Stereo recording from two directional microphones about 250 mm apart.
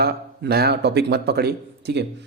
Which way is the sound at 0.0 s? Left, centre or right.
Right.